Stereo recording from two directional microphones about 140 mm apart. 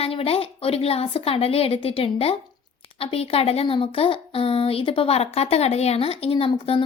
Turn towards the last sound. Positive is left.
turn(degrees=40)  # may be behind; listen again after turning